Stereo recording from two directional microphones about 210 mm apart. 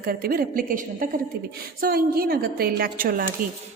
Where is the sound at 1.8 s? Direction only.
45° right (ahead or behind).